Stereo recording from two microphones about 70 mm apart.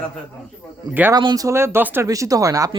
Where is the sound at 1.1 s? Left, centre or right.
Right.